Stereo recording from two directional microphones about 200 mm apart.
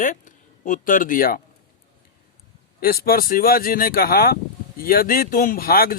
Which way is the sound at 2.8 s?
50° left (ahead or behind).